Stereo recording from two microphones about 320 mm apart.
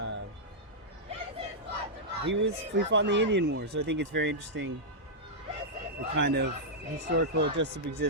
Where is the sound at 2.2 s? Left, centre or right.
Right.